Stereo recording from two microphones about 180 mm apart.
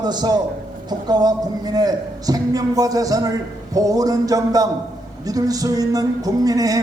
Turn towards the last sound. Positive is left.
turn(degrees=-20)  # may be behind; listen again after turning